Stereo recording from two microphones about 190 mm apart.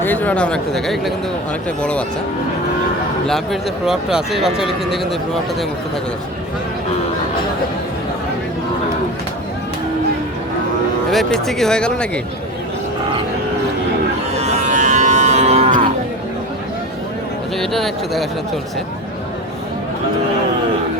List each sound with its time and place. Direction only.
0.0 s speech: 10° left (ahead or behind)
3.2 s speech: centre (ahead or behind)
11.1 s speech: centre (ahead or behind)
14.4 s cattle: 40° right (ahead or behind)
17.6 s speech: centre (ahead or behind)